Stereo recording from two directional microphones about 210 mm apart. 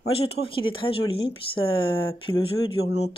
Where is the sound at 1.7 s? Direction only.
75° left (ahead or behind).